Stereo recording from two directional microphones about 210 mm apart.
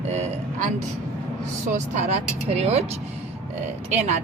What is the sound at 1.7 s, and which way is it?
Speech, 35° right (ahead or behind).